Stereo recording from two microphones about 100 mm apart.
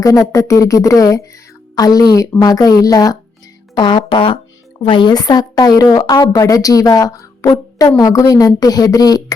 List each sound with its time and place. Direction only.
0.0 s speech: 35° left (ahead or behind)
3.8 s speech: 55° left (ahead or behind)
6.4 s speech: 35° left (ahead or behind)